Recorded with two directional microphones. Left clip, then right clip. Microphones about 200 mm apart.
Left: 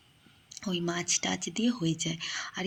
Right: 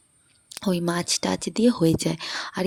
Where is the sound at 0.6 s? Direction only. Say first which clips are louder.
Right 7 dB; 55° right (ahead or behind).